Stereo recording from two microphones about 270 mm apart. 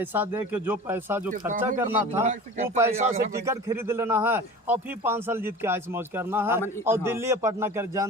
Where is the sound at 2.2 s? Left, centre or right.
Right.